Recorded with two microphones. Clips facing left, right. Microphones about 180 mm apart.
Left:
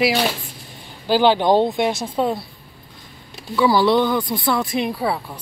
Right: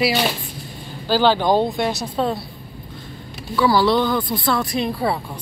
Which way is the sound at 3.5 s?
20° left (ahead or behind).